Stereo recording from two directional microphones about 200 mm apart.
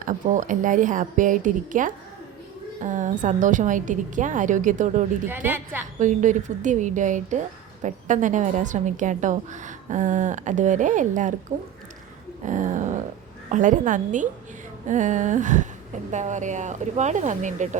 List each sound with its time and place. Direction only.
0.0 s a woman's voice: 40° right (ahead or behind)
5.3 s a woman's voice: 10° right (ahead or behind)
5.8 s a woman's voice: 40° right (ahead or behind)
12.5 s a sound: 40° right (ahead or behind)
13.5 s a woman's voice: 40° right (ahead or behind)